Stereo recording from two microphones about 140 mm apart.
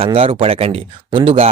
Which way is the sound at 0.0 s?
40° right (ahead or behind).